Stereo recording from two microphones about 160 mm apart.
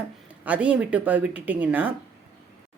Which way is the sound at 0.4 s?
10° right (ahead or behind).